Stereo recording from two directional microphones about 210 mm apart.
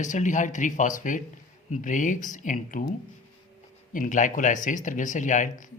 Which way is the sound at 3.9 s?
40° left (ahead or behind).